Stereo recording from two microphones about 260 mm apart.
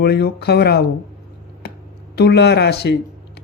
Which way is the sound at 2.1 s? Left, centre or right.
Left.